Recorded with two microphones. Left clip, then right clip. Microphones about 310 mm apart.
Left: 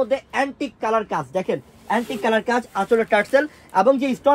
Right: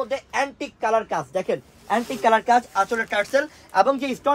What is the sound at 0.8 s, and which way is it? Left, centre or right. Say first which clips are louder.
Speech: even; left.